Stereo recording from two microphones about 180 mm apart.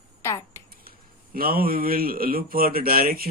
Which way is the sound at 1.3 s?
55° right (ahead or behind).